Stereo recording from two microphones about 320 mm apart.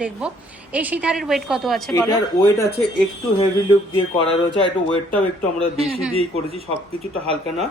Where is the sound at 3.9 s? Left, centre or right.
Centre.